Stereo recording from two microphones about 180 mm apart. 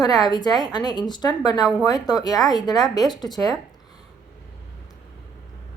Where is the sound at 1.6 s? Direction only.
5° right (ahead or behind).